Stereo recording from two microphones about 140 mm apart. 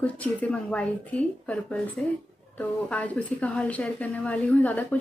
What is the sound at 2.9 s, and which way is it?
A woman's voice, 10° left (ahead or behind).